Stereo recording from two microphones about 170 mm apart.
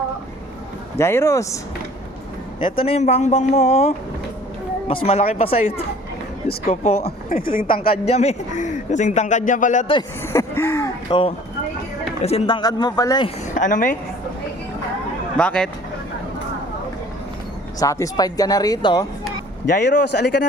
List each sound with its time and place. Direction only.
0.9 s speech: 15° left (ahead or behind)
2.6 s a man's voice: 30° left (ahead or behind)
7.0 s speech: 55° left (ahead or behind)
8.0 s speech: 40° left (ahead or behind)
10.2 s a sound: 15° left (ahead or behind)
11.1 s a man's voice: 30° left (ahead or behind)
13.5 s a woman's voice: 50° left (ahead or behind)
15.4 s speech: 5° left (ahead or behind)
17.7 s speech: 20° left (ahead or behind)
20.1 s a man's voice: 75° left (ahead or behind)